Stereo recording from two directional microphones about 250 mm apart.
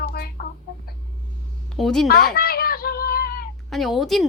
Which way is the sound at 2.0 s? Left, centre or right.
Left.